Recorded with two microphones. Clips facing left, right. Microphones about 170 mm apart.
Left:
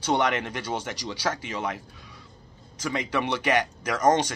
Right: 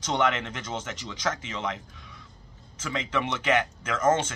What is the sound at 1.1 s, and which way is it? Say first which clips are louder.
Speech: left 1 dB; 35° left (ahead or behind).